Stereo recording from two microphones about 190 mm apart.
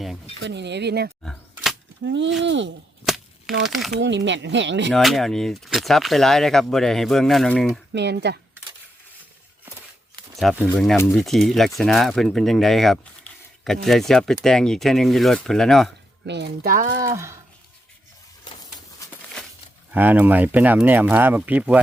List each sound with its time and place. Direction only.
0.4 s speech: 65° right (ahead or behind)
1.2 s camera: 5° left (ahead or behind)
2.0 s speech: 70° right (ahead or behind)
3.7 s speech: centre (ahead or behind)
4.0 s speech: 70° right (ahead or behind)
4.9 s speech: centre (ahead or behind)
7.9 s speech: 60° right (ahead or behind)
10.3 s speech: 5° right (ahead or behind)
10.9 s speech: 5° left (ahead or behind)
16.2 s speech: 65° right (ahead or behind)
17.0 s speech: 15° right (ahead or behind)
19.4 s a sound: 5° left (ahead or behind)
19.9 s speech: 10° right (ahead or behind)